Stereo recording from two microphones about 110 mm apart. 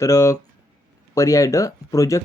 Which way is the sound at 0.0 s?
30° left (ahead or behind).